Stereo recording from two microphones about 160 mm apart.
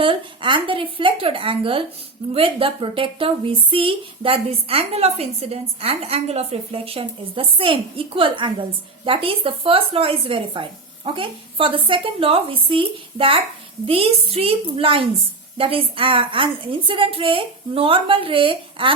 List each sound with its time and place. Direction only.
0.0 s a woman's voice: 30° right (ahead or behind)